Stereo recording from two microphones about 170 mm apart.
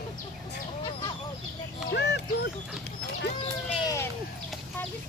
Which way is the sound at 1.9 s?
80° left.